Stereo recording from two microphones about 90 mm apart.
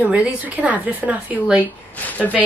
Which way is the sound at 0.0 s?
15° right (ahead or behind).